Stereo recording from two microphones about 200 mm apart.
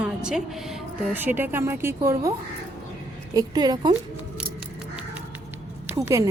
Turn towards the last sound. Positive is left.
turn(degrees=-15)  # may be behind; listen again after turning